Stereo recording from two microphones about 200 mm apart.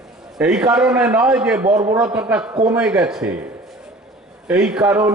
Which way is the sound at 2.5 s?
20° right (ahead or behind).